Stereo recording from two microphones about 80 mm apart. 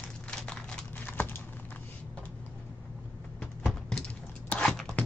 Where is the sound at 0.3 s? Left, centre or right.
Centre.